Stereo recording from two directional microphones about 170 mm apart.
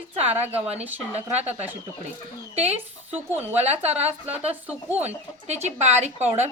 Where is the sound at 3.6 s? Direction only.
40° right (ahead or behind).